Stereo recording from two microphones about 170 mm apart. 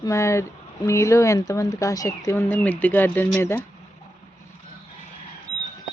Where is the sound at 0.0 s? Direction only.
15° left (ahead or behind).